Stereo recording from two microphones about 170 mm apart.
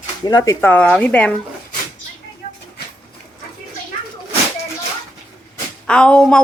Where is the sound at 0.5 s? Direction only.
10° left (ahead or behind).